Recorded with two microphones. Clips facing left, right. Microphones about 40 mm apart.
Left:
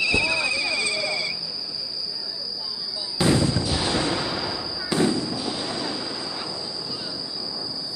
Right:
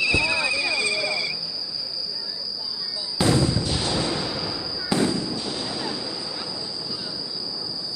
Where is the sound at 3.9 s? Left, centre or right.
Left.